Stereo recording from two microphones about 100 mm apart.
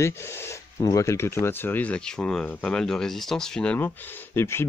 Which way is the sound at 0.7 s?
35° left (ahead or behind).